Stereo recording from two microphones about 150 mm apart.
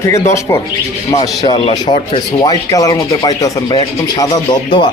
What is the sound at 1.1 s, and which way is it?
Speech, 30° left (ahead or behind).